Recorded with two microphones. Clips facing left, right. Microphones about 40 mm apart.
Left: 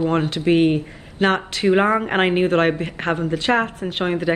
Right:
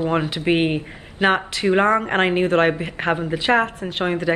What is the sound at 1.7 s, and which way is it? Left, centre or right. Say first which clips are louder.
Speech: even; centre.